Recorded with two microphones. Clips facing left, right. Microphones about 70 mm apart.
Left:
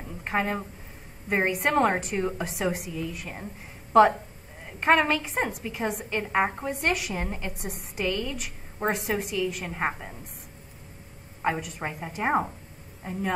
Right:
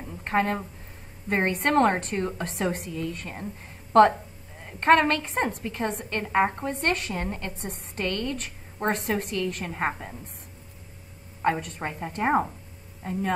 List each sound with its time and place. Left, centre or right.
0.0 s a woman's voice: centre
4.6 s a woman's voice: centre
11.4 s a woman's voice: centre